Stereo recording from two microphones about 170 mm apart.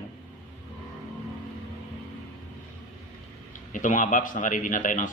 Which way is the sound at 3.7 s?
50° left (ahead or behind).